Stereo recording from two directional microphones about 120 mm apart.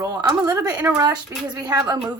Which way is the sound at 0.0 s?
30° right (ahead or behind).